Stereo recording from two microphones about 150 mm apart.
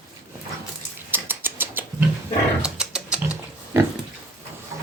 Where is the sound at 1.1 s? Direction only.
15° right (ahead or behind).